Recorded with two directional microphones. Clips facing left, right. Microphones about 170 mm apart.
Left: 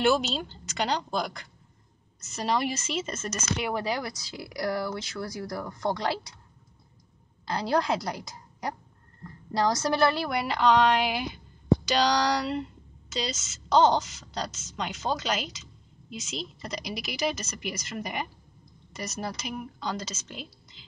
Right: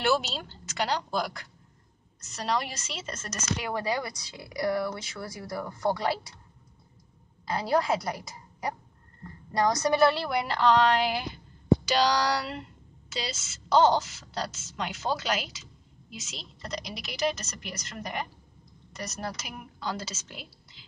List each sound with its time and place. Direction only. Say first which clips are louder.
0.0 s a woman's voice: left 3 dB; 5° right (ahead or behind)
3.0 s speech: left 5 dB; 20° left (ahead or behind)
4.6 s a woman's voice: right 1 dB; centre (ahead or behind)
7.4 s a woman's voice: even; centre (ahead or behind)